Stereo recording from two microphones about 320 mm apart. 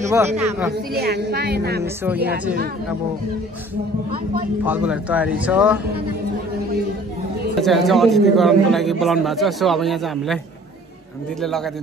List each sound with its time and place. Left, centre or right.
0.0 s speech: centre
0.9 s speech: right
4.6 s a man's voice: centre
7.6 s a man's voice: centre
11.4 s a man's voice: centre